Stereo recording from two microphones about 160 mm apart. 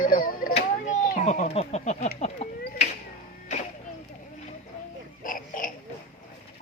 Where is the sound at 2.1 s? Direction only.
45° left (ahead or behind).